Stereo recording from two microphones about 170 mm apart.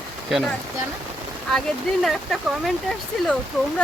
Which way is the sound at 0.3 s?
Centre (ahead or behind).